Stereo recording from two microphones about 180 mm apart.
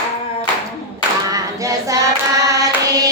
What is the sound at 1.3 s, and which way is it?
Hands, 20° right (ahead or behind).